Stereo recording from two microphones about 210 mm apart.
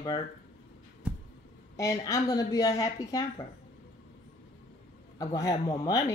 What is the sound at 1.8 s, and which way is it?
Speech, 15° left (ahead or behind).